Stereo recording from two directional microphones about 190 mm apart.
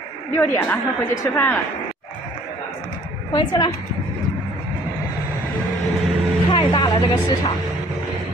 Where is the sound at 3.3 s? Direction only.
20° left (ahead or behind).